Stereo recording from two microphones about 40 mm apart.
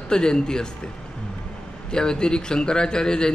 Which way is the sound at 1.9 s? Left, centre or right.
Centre.